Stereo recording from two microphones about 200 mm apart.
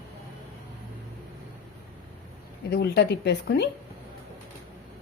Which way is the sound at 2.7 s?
55° left (ahead or behind).